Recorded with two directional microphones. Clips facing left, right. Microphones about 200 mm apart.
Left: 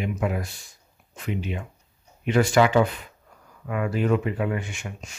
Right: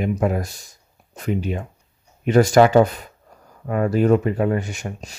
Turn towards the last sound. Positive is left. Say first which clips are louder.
# right 6 dB
turn(degrees=-40)  # may be behind; listen again after turning